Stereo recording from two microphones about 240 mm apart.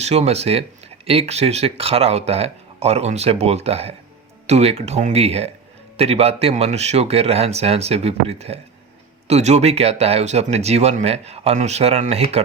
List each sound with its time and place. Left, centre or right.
0.0 s speech: right